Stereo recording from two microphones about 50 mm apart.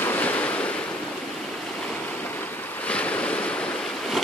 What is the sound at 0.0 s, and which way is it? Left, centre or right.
Waves, left.